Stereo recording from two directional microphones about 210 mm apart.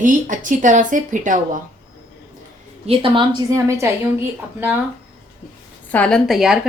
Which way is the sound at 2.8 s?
25° right (ahead or behind).